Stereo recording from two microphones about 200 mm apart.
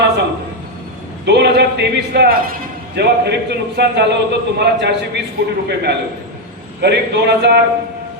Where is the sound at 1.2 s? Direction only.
55° right (ahead or behind).